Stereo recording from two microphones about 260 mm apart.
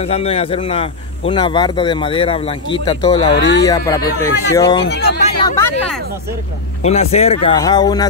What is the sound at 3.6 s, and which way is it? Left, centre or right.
Speech, centre.